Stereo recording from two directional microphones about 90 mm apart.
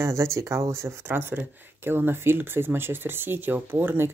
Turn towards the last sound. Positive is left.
turn(degrees=-25)  # may be behind; listen again after turning